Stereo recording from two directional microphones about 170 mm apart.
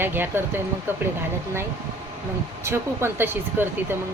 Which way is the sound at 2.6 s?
15° right (ahead or behind).